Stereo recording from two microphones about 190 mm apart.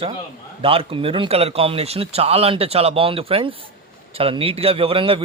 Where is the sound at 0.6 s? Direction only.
30° right (ahead or behind).